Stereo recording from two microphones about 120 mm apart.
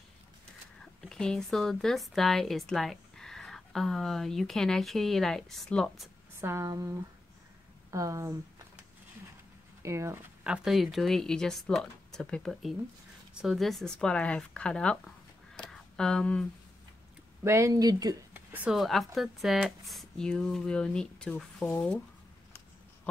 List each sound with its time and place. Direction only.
1.0 s speech: 5° left (ahead or behind)
6.4 s speech: 25° right (ahead or behind)
9.8 s speech: 25° right (ahead or behind)
10.4 s speech: 5° right (ahead or behind)
17.4 s speech: 25° right (ahead or behind)
18.3 s a sound: 15° right (ahead or behind)
18.7 s speech: centre (ahead or behind)